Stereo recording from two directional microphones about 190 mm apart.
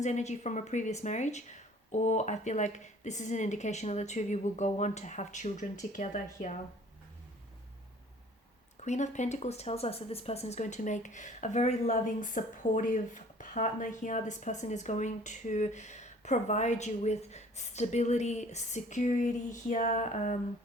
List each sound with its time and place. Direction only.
0.0 s speech: 40° left (ahead or behind)
8.8 s speech: 40° left (ahead or behind)